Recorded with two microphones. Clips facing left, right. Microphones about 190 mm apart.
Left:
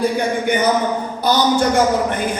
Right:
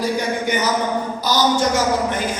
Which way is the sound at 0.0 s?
55° left (ahead or behind).